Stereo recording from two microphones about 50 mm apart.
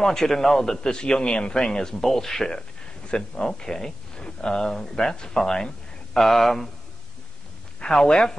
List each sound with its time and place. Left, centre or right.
0.0 s a man's voice: centre
7.8 s a man's voice: centre